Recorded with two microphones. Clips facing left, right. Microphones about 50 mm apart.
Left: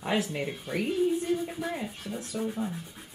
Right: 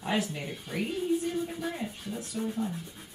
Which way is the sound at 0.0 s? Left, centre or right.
Centre.